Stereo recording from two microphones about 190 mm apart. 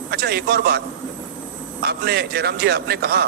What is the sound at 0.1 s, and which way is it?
Speech, 60° right (ahead or behind).